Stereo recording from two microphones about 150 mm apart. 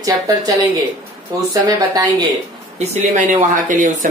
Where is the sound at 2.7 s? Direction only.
50° right (ahead or behind).